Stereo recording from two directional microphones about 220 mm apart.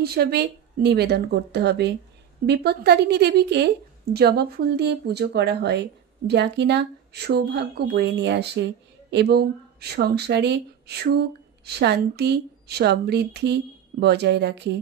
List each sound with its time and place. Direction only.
0.0 s a woman's voice: 45° right (ahead or behind)